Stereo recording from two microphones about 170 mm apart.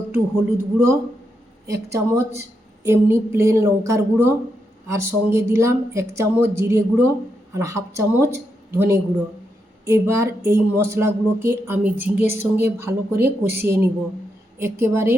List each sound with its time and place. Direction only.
0.1 s speech: 15° right (ahead or behind)